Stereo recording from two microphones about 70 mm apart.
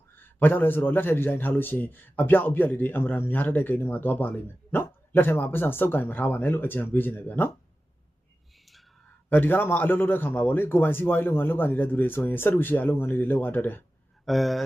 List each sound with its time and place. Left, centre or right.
0.2 s a man's voice: left
8.5 s whispering: centre
9.3 s a man's voice: left
14.3 s speech: centre